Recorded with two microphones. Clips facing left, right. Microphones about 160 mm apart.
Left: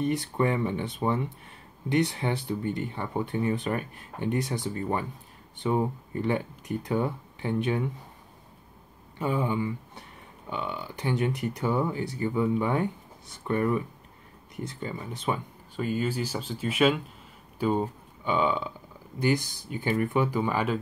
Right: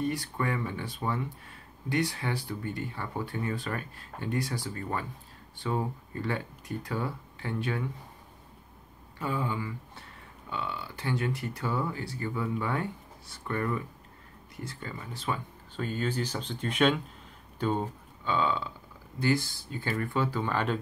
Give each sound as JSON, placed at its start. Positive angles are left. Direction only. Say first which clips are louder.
{"t": 0.0, "sound": "speech", "louder": "left 5 dB", "side_deg": 20}
{"t": 9.2, "sound": "speech", "louder": "left 5 dB", "side_deg": 20}